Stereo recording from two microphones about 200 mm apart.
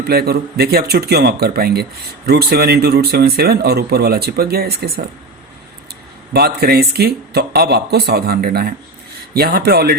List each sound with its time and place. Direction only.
0.1 s speech: 50° right (ahead or behind)
6.3 s speech: 50° right (ahead or behind)